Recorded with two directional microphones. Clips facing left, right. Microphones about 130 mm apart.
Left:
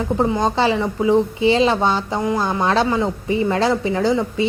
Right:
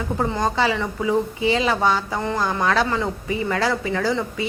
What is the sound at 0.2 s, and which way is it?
A woman's voice, 20° left (ahead or behind).